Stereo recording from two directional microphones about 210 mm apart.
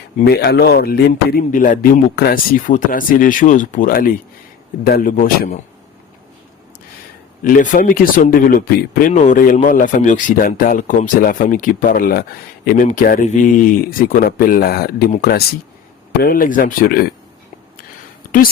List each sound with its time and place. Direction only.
0.3 s speech: 50° left (ahead or behind)
7.4 s speech: 40° left (ahead or behind)